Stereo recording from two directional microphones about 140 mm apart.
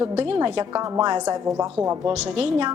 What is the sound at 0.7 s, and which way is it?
Speech, 20° right (ahead or behind).